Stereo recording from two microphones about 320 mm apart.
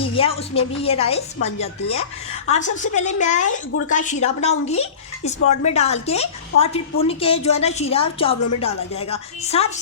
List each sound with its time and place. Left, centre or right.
0.0 s a woman's voice: centre